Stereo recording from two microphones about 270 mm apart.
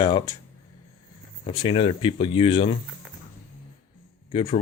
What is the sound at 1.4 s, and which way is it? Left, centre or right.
Speech, centre.